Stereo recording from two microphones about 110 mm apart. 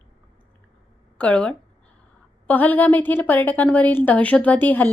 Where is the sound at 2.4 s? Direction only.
15° left (ahead or behind).